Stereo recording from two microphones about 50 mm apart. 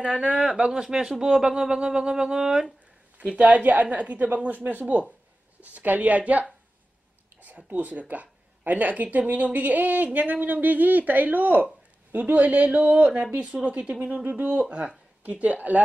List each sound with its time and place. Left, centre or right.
0.2 s speech: centre
3.3 s a woman's voice: right
7.4 s a woman's voice: right
14.2 s a woman's voice: right